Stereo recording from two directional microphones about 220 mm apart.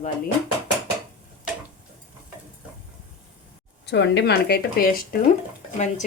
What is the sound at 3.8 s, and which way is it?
A woman's voice, 50° left (ahead or behind).